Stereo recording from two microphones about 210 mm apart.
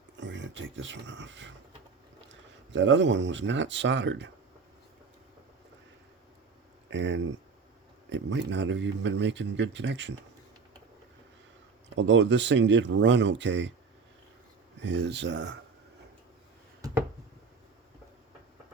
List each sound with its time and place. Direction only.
0.2 s speech: 60° right (ahead or behind)
6.9 s speech: 55° right (ahead or behind)
11.9 s speech: 60° right (ahead or behind)
14.8 s speech: 60° right (ahead or behind)